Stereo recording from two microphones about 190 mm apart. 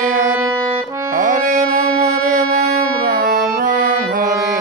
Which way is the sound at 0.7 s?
15° right (ahead or behind).